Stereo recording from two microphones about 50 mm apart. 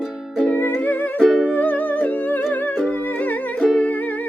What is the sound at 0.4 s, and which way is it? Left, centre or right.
Music, left.